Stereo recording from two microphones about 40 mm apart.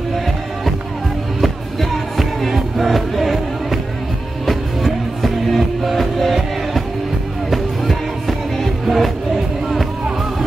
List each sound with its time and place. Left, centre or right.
1.4 s music: centre